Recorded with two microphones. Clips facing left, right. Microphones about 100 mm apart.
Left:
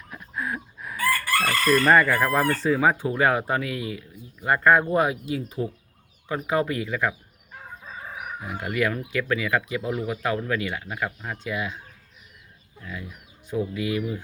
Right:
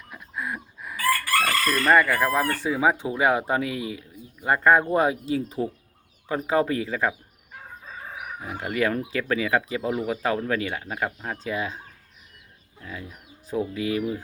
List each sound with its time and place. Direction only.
0.1 s a sound: centre (ahead or behind)
1.4 s chicken: centre (ahead or behind)
2.6 s speech: 10° right (ahead or behind); by 7.1 s 30° right (ahead or behind)
8.4 s speech: 25° right (ahead or behind)
12.8 s speech: 25° right (ahead or behind)